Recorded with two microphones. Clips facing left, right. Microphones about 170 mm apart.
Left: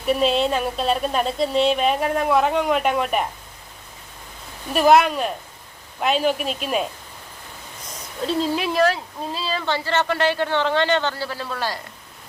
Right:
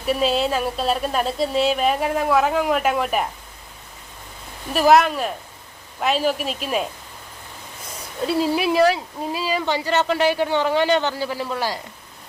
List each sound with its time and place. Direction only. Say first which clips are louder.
0.0 s speech: left 1 dB; centre (ahead or behind)
4.7 s speech: even; centre (ahead or behind)
8.3 s speech: right 3 dB; 10° right (ahead or behind)